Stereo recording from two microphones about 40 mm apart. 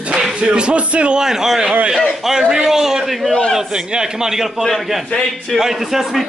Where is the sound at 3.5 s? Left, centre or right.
Centre.